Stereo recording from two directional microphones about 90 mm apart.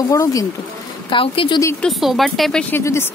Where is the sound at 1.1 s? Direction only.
70° left (ahead or behind).